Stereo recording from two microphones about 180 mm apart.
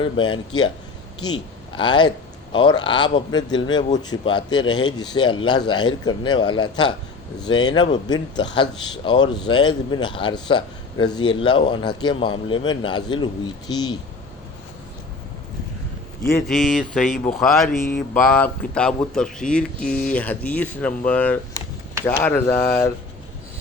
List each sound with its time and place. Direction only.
0.0 s a man's voice: 25° left (ahead or behind)
16.5 s a sound: centre (ahead or behind)
17.7 s speech: 45° left (ahead or behind)
18.1 s speech: 10° left (ahead or behind)
18.7 s a sound: 5° left (ahead or behind)
19.8 s speech: 50° left (ahead or behind)
20.1 s speech: 10° left (ahead or behind)